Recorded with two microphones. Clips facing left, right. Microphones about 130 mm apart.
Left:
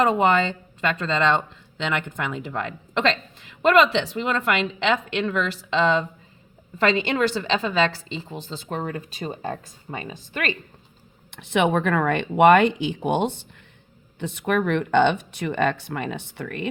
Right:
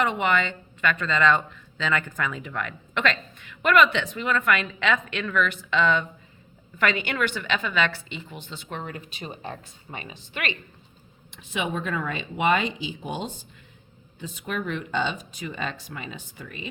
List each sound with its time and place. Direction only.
0.0 s a woman's voice: 35° left (ahead or behind)
11.3 s speech: 75° left (ahead or behind)